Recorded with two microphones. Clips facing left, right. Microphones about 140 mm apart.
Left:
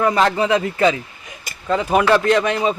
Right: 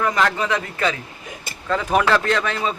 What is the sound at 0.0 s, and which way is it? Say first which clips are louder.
Speech: left 4 dB; 30° left (ahead or behind).